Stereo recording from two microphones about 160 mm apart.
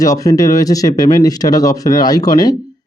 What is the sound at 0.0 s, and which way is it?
Speech, 20° left (ahead or behind).